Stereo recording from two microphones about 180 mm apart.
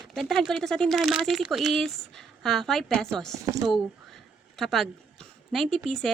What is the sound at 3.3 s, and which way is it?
Speech, 15° right (ahead or behind).